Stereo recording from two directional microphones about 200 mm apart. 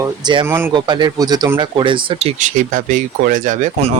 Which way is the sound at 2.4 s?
40° right (ahead or behind).